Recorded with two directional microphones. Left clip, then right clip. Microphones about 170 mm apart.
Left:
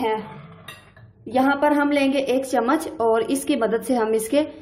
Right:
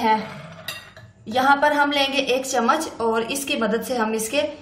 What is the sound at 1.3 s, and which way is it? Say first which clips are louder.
A woman's voice: right 2 dB; 40° left (ahead or behind).